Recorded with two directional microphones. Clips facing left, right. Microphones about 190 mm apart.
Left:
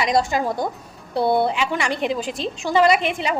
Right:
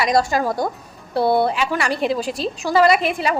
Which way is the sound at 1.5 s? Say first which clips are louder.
Right 2 dB; 20° left (ahead or behind).